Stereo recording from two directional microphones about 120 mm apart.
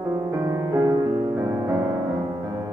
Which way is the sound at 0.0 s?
20° right (ahead or behind).